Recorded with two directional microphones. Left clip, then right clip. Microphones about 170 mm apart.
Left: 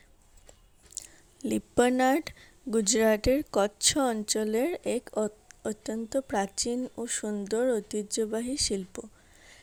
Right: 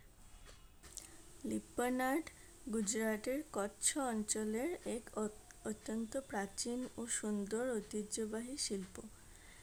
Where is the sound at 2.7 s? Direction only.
40° left (ahead or behind).